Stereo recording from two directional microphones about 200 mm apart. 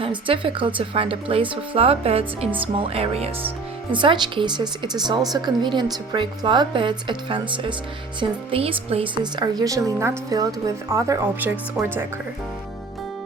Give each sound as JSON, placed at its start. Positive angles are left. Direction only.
{"t": 0.0, "sound": "a woman's voice", "side_deg": -25}